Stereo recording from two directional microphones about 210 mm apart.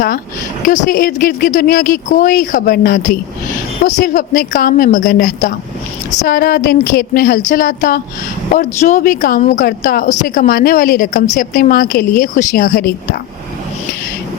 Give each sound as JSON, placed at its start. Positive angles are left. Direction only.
{"t": 0.6, "sound": "a woman's voice", "side_deg": 40}